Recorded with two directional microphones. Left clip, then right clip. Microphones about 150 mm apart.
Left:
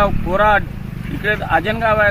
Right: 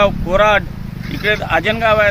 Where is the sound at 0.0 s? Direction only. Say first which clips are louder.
Right 2 dB; 40° right (ahead or behind).